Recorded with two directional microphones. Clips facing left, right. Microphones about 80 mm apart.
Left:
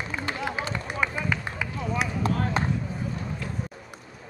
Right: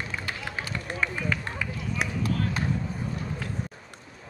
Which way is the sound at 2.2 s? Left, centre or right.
Left.